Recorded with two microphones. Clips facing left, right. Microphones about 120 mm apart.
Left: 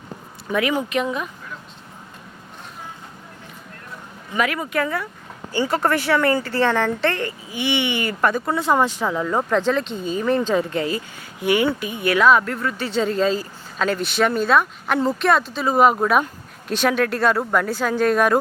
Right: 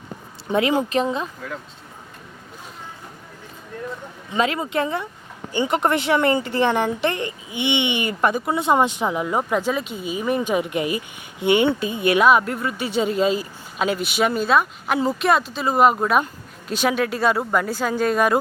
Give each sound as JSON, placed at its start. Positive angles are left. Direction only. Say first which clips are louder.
{"t": 0.4, "sound": "speech", "louder": "right 2 dB", "side_deg": -30}
{"t": 4.3, "sound": "speech", "louder": "right 1 dB", "side_deg": -25}